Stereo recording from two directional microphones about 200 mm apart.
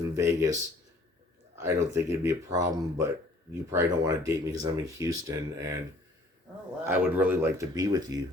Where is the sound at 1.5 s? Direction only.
15° right (ahead or behind).